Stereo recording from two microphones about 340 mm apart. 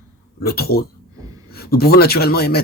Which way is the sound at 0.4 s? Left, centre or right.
Left.